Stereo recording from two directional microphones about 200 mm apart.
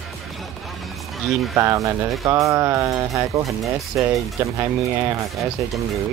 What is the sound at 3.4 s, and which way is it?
Speech, centre (ahead or behind).